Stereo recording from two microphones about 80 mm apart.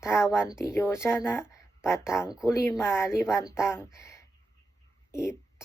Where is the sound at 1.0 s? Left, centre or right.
Centre.